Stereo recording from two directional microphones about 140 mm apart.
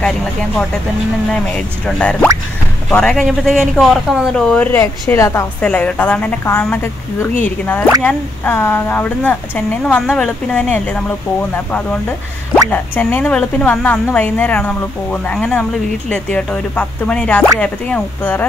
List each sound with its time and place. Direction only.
0.0 s a man's voice: 5° left (ahead or behind)
4.7 s speech: 20° left (ahead or behind)
5.6 s speech: 10° left (ahead or behind)
12.7 s speech: 15° left (ahead or behind)